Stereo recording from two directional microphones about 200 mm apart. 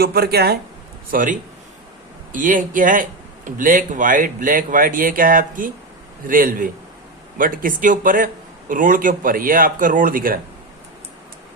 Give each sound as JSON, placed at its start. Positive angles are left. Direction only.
{"t": 0.0, "sound": "speech", "side_deg": -50}